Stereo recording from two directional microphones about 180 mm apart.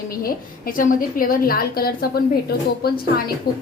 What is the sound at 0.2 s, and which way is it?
A woman's voice, 55° left (ahead or behind).